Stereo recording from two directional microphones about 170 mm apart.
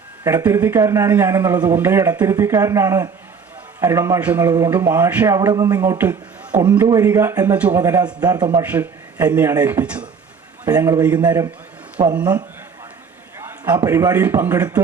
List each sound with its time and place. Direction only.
0.4 s speech: 15° right (ahead or behind)
4.4 s a man's voice: 20° right (ahead or behind)
4.7 s speech: 10° right (ahead or behind)
6.0 s a sound: 10° right (ahead or behind)
6.8 s a man's voice: 20° right (ahead or behind)
7.8 s a man's voice: 20° right (ahead or behind)
8.6 s a man's voice: 10° right (ahead or behind)
10.7 s a man's voice: 20° right (ahead or behind)
13.4 s a sound: 15° right (ahead or behind)
13.7 s speech: 20° right (ahead or behind)